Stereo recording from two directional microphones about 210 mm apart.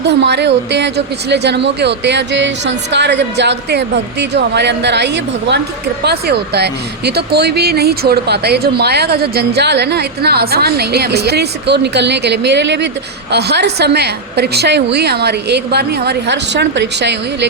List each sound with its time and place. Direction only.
0.0 s a woman's voice: 55° right (ahead or behind)